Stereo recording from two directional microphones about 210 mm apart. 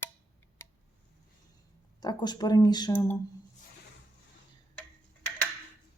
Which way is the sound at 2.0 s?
20° left (ahead or behind).